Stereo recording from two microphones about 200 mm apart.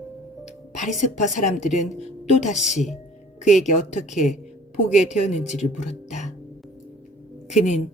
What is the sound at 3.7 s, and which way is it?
A woman's voice, 35° left (ahead or behind).